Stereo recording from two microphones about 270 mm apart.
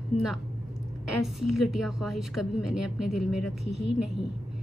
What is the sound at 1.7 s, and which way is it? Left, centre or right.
Speech, centre.